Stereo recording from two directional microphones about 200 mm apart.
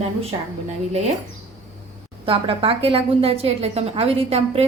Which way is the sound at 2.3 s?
25° right (ahead or behind).